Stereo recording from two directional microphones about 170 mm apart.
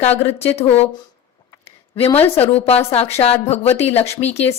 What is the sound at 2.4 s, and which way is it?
Speech, 35° left (ahead or behind).